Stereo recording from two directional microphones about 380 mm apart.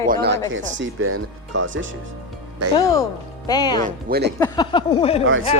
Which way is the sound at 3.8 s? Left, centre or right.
Right.